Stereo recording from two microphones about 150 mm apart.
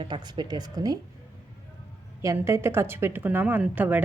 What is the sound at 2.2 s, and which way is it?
Speech, 20° right (ahead or behind).